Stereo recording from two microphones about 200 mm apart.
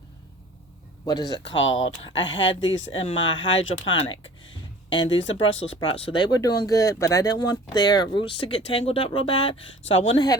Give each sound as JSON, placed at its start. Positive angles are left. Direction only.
{"t": 1.0, "sound": "speech", "side_deg": 20}
{"t": 1.5, "sound": "speech", "side_deg": 70}
{"t": 1.7, "sound": "speech", "side_deg": 25}
{"t": 2.1, "sound": "speech", "side_deg": 70}
{"t": 2.9, "sound": "speech", "side_deg": 30}
{"t": 3.3, "sound": "speech", "side_deg": 70}
{"t": 4.9, "sound": "speech", "side_deg": 25}
{"t": 5.2, "sound": "speech", "side_deg": 70}
{"t": 5.6, "sound": "speech", "side_deg": 25}